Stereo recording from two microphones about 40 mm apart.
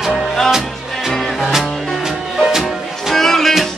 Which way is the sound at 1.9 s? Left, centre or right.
Centre.